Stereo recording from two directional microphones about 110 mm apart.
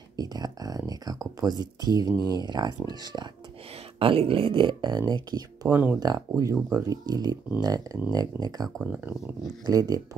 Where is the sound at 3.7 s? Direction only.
60° right (ahead or behind); by 5.7 s 40° right (ahead or behind).